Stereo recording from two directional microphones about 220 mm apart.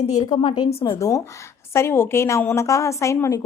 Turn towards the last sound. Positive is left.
turn(degrees=15)  # may be behind; listen again after turning